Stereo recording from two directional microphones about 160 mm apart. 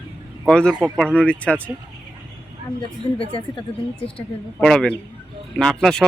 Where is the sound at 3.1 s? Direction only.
35° left (ahead or behind).